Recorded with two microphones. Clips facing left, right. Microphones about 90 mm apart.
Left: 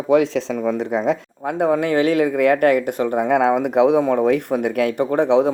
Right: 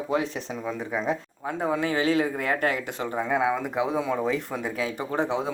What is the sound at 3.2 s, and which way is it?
Speech, 80° left.